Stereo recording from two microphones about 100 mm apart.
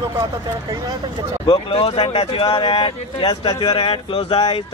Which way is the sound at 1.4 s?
65° left (ahead or behind).